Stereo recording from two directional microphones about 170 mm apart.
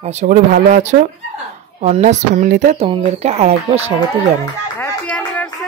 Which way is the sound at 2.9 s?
35° right (ahead or behind).